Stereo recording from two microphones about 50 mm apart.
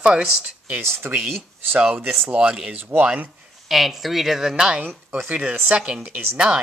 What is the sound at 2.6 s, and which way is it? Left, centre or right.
Speech, right.